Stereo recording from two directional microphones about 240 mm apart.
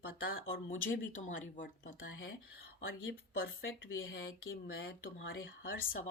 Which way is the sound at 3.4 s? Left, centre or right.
Left.